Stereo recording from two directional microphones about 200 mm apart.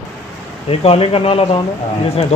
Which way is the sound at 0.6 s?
30° left (ahead or behind).